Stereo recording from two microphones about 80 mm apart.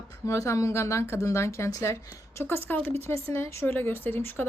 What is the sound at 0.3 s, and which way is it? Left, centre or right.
Speech, left.